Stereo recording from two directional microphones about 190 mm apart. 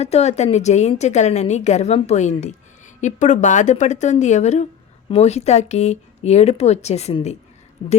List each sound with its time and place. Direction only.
0.0 s a woman's voice: 35° left (ahead or behind)